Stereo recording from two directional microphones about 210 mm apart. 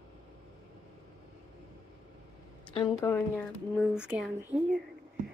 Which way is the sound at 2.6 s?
25° left (ahead or behind).